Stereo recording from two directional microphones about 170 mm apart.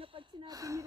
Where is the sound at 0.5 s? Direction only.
20° right (ahead or behind).